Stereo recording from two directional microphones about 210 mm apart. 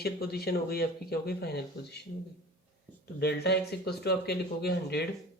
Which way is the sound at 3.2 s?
50° left (ahead or behind).